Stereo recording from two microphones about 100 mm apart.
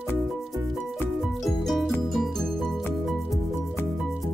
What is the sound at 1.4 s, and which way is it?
Music, centre (ahead or behind).